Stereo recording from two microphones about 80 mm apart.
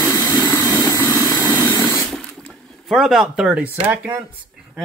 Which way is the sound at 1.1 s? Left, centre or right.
Left.